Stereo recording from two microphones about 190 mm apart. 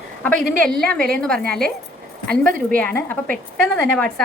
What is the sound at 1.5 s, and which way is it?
Speech, 5° left (ahead or behind).